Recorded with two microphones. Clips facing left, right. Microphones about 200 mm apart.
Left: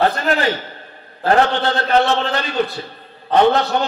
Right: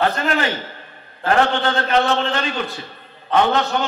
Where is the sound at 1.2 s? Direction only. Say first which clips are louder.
Left 2 dB; 35° left (ahead or behind).